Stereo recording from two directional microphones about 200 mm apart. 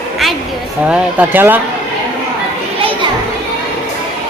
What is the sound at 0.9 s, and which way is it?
Speech, 10° right (ahead or behind).